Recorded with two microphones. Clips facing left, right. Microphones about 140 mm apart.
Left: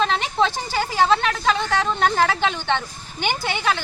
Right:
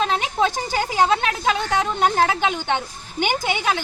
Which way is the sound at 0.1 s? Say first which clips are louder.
Even; 10° right (ahead or behind).